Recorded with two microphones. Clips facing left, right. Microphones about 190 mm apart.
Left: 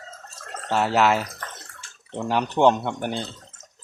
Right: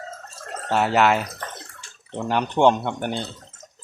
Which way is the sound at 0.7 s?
Centre (ahead or behind).